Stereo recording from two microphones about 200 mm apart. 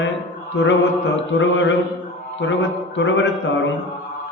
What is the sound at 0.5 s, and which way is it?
A man's voice, 65° left (ahead or behind).